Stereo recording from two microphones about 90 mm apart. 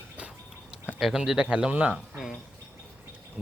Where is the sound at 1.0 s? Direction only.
5° right (ahead or behind).